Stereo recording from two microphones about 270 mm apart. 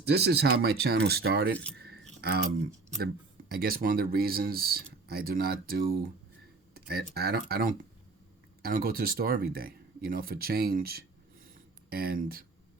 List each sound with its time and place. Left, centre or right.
0.0 s speech: right
1.8 s keys jangling: right
3.5 s speech: right